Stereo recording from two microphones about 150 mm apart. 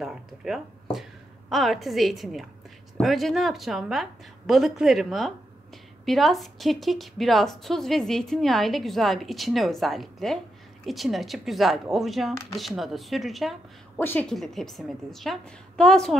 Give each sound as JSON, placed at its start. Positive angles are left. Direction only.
{"t": 0.0, "sound": "a woman's voice", "side_deg": 0}
{"t": 13.9, "sound": "a woman's voice", "side_deg": 15}
{"t": 14.3, "sound": "a woman's voice", "side_deg": 0}